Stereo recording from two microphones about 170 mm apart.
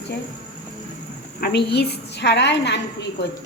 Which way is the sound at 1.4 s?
65° left (ahead or behind).